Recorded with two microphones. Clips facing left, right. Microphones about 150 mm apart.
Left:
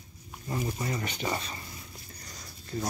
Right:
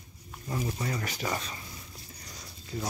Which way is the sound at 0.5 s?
5° left (ahead or behind).